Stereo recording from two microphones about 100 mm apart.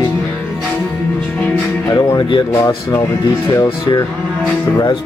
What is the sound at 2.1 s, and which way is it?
Speech, 45° left (ahead or behind).